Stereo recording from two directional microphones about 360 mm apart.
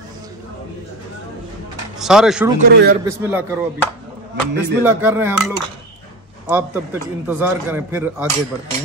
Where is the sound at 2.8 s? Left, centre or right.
Right.